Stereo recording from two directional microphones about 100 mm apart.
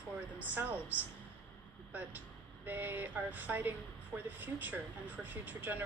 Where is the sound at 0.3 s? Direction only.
15° right (ahead or behind).